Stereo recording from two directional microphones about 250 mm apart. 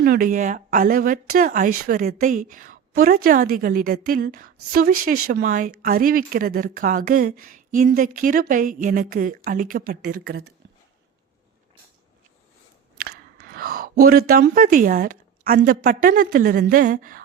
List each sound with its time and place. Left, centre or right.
0.0 s speech: right
13.0 s speech: right